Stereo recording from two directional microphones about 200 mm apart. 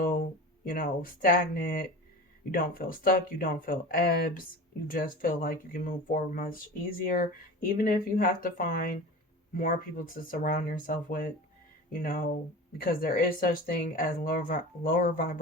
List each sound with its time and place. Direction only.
0.0 s speech: 45° left (ahead or behind)